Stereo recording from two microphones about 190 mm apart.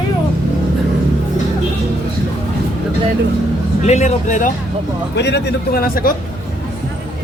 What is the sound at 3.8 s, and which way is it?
Speech, 35° left (ahead or behind).